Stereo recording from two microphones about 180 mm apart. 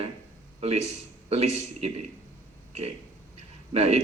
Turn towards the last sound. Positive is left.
turn(degrees=-35)  # may be behind; listen again after turning